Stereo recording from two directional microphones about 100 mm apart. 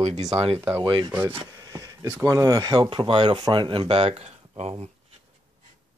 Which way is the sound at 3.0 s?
60° right (ahead or behind).